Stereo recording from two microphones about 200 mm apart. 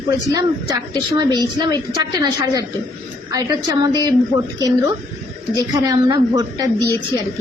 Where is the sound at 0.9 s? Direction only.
20° right (ahead or behind).